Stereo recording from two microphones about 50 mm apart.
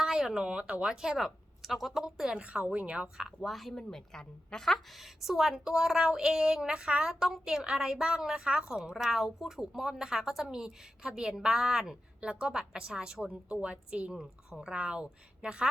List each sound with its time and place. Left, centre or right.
0.0 s speech: centre
2.4 s a woman's voice: right
3.4 s a woman's voice: centre
3.9 s a woman's voice: centre
12.2 s a woman's voice: right